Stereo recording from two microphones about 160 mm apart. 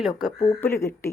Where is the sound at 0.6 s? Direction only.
15° left (ahead or behind).